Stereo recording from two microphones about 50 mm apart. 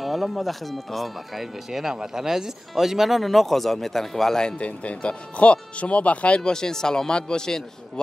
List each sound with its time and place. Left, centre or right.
0.0 s speech: centre
4.6 s speech: left